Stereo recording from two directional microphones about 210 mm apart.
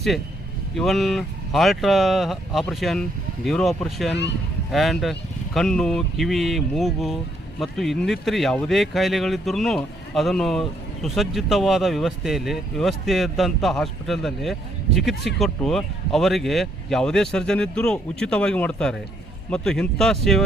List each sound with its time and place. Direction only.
0.8 s speech: centre (ahead or behind)